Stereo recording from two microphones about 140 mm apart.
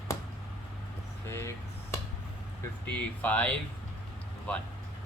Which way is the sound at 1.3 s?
20° left (ahead or behind).